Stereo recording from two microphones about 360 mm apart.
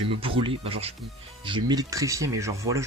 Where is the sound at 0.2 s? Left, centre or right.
Centre.